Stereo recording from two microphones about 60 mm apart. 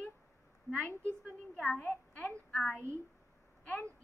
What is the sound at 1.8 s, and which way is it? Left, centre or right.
Speech, left.